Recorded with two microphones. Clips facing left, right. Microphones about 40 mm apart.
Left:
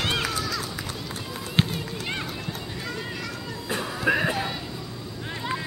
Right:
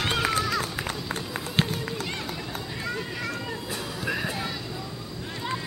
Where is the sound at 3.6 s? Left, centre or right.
Left.